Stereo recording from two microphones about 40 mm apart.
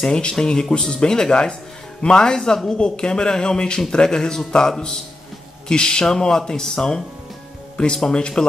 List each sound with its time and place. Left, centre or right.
0.2 s speech: centre